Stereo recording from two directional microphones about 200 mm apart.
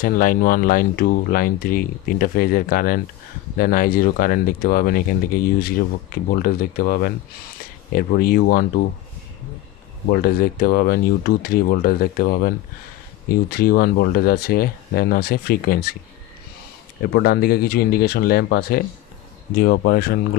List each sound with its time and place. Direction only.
0.0 s speech: 45° left (ahead or behind)
10.1 s speech: 45° left (ahead or behind)
17.0 s speech: 50° left (ahead or behind)